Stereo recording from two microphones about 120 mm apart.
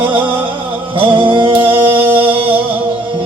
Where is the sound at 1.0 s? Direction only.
45° right (ahead or behind).